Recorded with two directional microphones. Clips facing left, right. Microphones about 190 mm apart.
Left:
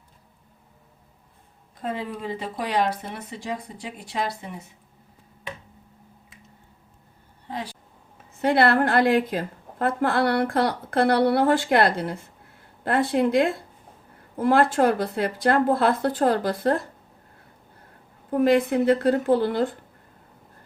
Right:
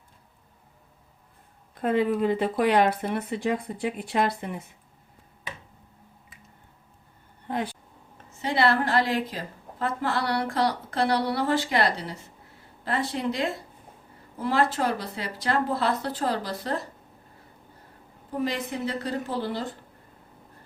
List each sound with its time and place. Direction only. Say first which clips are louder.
1.8 s speech: right 7 dB; 60° right (ahead or behind)
7.4 s a sound: right 3 dB; 55° right (ahead or behind)
8.4 s a woman's voice: left 4 dB; 55° left (ahead or behind)
18.3 s a woman's voice: left 10 dB; 55° left (ahead or behind)